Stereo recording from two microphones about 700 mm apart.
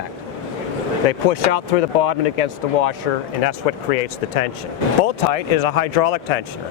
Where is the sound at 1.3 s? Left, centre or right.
Left.